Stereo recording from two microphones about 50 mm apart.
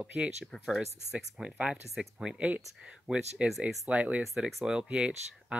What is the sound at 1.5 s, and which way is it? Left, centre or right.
Speech, right.